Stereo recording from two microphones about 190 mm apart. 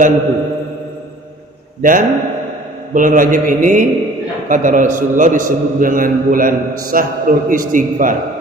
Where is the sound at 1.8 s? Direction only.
45° right (ahead or behind).